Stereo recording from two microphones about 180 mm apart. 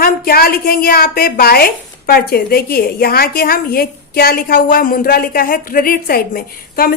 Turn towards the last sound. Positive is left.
turn(degrees=55)  # may be behind; listen again after turning